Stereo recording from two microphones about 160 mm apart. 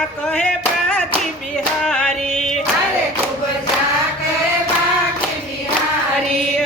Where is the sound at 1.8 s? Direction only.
5° left (ahead or behind).